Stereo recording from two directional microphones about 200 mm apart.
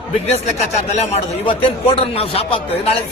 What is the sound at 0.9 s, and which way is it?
Speech, 30° left (ahead or behind).